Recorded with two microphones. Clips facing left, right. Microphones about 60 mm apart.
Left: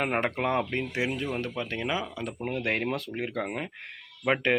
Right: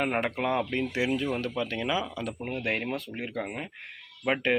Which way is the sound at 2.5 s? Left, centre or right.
Left.